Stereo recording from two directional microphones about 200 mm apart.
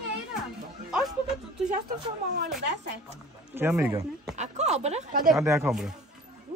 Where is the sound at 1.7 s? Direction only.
45° right (ahead or behind).